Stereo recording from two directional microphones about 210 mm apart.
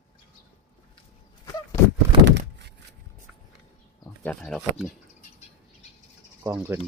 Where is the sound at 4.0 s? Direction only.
10° left (ahead or behind).